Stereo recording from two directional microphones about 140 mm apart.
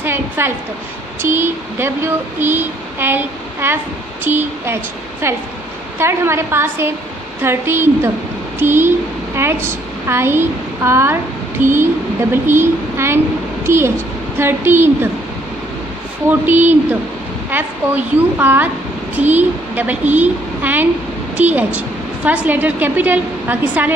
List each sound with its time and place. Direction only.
0.0 s a sound: 15° right (ahead or behind)
1.2 s child singing: 15° right (ahead or behind)
5.2 s speech: 20° right (ahead or behind)
5.9 s child singing: 20° right (ahead or behind)
8.5 s a woman's voice: 15° right (ahead or behind)
11.6 s child singing: 15° right (ahead or behind)
16.3 s child singing: 15° right (ahead or behind)
21.7 s a woman's voice: 10° right (ahead or behind)